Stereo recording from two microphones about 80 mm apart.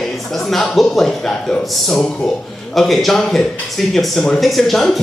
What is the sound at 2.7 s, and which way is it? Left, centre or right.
Speech, centre.